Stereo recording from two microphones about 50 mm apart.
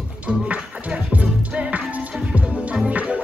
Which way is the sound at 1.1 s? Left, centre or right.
Right.